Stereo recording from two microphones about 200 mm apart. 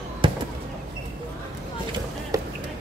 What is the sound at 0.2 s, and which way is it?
Fireworks, 25° right (ahead or behind).